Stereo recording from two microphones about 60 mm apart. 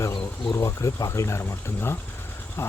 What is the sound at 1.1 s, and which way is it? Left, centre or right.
Speech, left.